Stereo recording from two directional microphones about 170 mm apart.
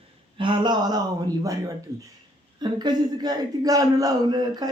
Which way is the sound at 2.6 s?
25° right (ahead or behind).